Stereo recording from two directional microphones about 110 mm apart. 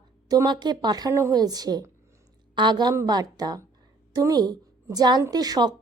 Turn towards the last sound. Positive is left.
turn(degrees=-35)  # may be behind; listen again after turning